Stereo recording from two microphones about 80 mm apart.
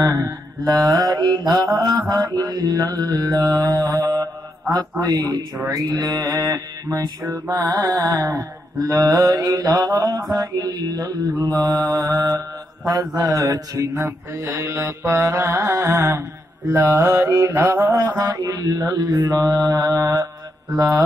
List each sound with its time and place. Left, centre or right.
0.0 s mantra: right
5.6 s mantra: right
7.2 s mantra: right
7.7 s mantra: right
13.7 s mantra: right